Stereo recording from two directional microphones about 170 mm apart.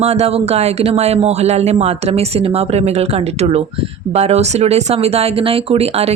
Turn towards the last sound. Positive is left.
turn(degrees=-35)  # may be behind; listen again after turning